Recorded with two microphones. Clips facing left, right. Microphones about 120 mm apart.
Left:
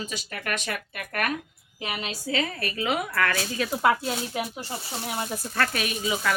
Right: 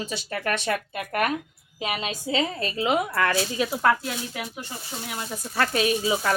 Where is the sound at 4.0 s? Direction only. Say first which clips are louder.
Left 3 dB; 25° left (ahead or behind).